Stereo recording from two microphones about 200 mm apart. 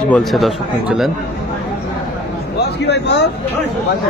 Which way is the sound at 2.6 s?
60° left (ahead or behind).